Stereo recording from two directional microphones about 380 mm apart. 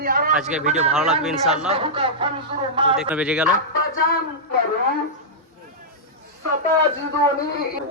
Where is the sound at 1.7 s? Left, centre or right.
Centre.